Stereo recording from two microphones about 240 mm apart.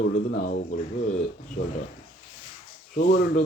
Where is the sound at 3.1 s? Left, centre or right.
Left.